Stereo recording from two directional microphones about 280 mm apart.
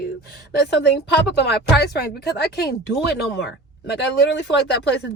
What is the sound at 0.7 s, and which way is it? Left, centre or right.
Speech, left.